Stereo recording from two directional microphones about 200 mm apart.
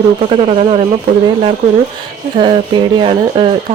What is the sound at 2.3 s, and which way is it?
Speech, 25° right (ahead or behind).